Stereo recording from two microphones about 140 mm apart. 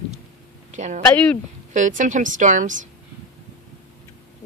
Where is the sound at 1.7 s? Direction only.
65° right (ahead or behind).